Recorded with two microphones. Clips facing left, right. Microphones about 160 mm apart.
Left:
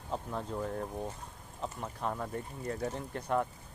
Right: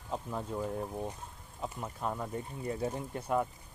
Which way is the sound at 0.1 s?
5° right (ahead or behind).